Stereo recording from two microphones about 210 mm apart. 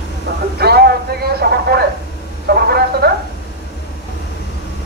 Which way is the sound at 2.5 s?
50° right (ahead or behind).